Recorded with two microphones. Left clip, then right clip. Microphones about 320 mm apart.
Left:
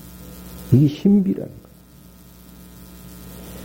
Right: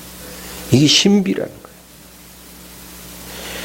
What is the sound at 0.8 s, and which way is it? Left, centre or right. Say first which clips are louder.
Speech: right 7 dB; centre.